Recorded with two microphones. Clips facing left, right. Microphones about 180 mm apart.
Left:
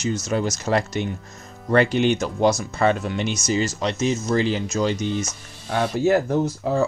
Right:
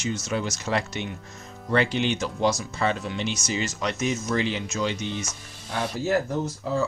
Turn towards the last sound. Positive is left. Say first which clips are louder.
# left 5 dB
turn(degrees=60)  # may be behind; listen again after turning